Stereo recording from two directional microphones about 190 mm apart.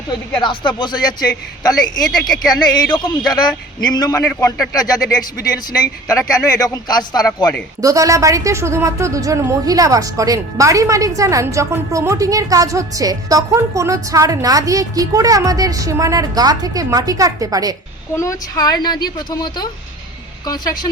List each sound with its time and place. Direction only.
0.4 s a woman's voice: 25° left (ahead or behind)
7.8 s a woman's voice: 15° right (ahead or behind)
18.1 s a woman's voice: 15° left (ahead or behind)